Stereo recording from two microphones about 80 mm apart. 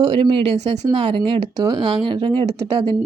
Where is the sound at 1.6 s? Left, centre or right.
Right.